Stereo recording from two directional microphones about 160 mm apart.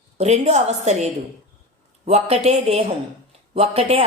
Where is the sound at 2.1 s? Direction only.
40° right (ahead or behind).